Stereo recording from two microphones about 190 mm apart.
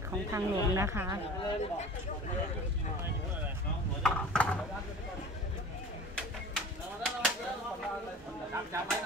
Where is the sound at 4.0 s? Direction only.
5° left (ahead or behind).